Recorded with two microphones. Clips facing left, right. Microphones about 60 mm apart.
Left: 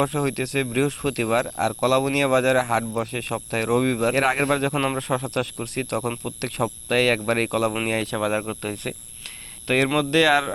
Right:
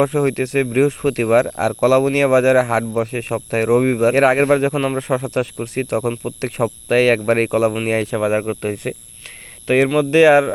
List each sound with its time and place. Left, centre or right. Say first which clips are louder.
0.0 s speech: right 6 dB; right
4.7 s speech: right 4 dB; centre
4.9 s speech: right 5 dB; right
9.6 s speech: right 6 dB; centre